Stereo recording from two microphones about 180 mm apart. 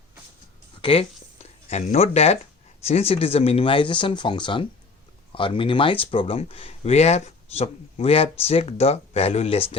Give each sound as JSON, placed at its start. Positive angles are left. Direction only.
{"t": 0.8, "sound": "speech", "side_deg": 30}